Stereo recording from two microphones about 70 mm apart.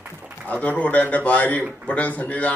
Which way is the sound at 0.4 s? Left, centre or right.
Left.